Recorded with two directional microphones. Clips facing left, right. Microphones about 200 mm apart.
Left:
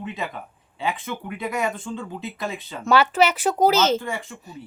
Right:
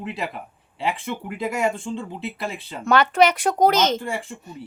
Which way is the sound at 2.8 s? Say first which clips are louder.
Right 1 dB; 5° left (ahead or behind).